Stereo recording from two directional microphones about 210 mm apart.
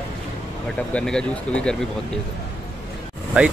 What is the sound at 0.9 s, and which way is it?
Speech, 5° left (ahead or behind).